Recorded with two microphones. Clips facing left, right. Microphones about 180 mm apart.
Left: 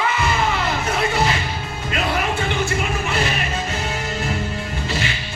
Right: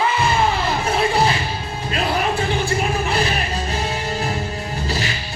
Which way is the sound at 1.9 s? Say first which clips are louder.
Right 2 dB; 35° right (ahead or behind).